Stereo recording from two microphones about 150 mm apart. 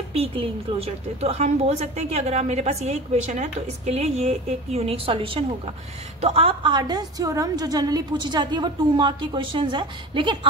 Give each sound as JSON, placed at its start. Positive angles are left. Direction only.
{"t": 0.1, "sound": "a woman's voice", "side_deg": -40}